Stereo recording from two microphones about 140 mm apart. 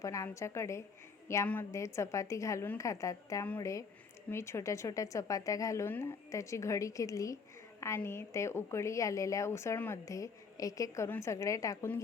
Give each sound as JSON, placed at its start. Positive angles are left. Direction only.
{"t": 0.0, "sound": "a woman's voice", "side_deg": 20}